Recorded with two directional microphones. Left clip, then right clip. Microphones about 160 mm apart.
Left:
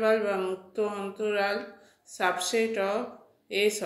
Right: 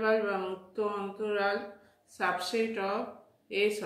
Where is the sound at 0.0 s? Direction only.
20° left (ahead or behind).